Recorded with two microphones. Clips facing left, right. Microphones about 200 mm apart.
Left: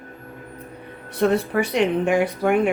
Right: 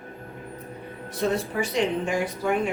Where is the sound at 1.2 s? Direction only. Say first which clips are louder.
Left 6 dB; 65° left (ahead or behind).